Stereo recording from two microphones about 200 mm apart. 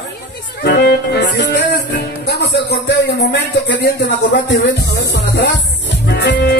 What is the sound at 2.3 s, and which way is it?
Speech, 60° left (ahead or behind).